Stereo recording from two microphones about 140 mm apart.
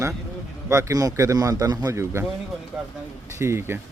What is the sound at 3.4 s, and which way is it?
Speech, 20° right (ahead or behind).